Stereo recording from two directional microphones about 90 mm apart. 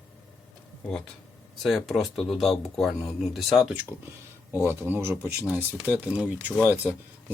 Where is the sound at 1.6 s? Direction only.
Centre (ahead or behind).